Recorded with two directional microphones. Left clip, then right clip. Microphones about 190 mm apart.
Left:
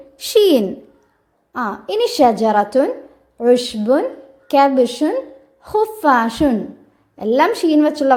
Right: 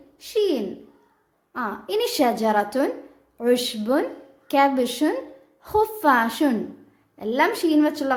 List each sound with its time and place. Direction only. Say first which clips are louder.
0.2 s speech: left 10 dB; 50° left (ahead or behind)
1.5 s a woman's voice: left 6 dB; 20° left (ahead or behind)